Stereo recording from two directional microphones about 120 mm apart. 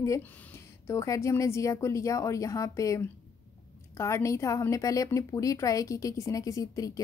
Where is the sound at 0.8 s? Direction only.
25° left (ahead or behind).